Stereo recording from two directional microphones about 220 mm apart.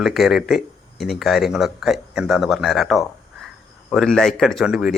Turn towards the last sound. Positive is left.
turn(degrees=-5)  # may be behind; listen again after turning